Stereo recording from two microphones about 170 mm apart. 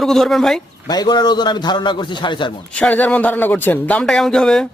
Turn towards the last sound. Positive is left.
turn(degrees=5)  # may be behind; listen again after turning